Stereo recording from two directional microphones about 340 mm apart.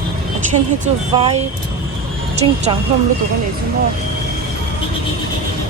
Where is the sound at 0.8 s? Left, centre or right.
Centre.